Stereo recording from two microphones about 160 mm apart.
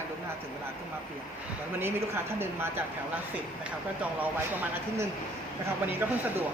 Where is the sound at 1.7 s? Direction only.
15° right (ahead or behind).